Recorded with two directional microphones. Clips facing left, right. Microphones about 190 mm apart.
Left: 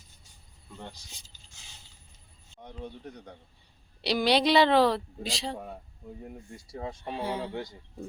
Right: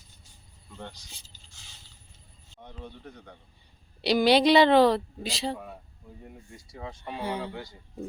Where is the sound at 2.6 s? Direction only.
15° left (ahead or behind).